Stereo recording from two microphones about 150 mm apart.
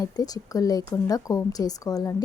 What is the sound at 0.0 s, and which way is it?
Speech, 25° left (ahead or behind).